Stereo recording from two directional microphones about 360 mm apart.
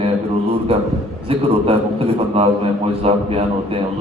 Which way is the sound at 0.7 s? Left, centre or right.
Centre.